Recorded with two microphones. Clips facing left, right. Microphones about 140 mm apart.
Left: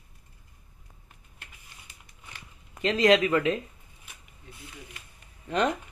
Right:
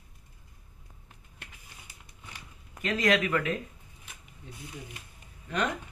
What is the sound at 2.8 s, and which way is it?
Speech, 30° left (ahead or behind).